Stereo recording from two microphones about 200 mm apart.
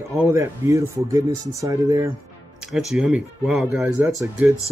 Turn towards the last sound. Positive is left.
turn(degrees=-5)  # may be behind; listen again after turning